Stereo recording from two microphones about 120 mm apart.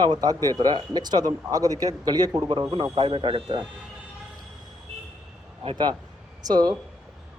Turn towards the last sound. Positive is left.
turn(degrees=-35)  # may be behind; listen again after turning